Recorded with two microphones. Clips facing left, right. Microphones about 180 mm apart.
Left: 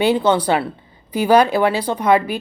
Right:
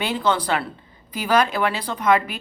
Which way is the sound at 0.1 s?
30° left (ahead or behind).